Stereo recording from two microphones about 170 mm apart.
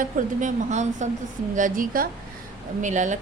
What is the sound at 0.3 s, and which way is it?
A woman's voice, 45° right (ahead or behind).